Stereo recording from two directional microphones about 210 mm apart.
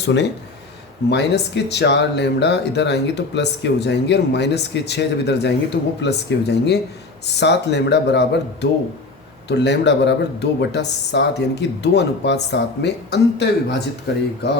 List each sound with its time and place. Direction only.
0.0 s speech: 55° left (ahead or behind)
9.5 s speech: 55° left (ahead or behind)